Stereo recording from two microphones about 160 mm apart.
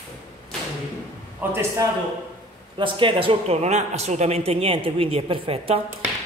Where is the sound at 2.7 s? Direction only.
30° right (ahead or behind).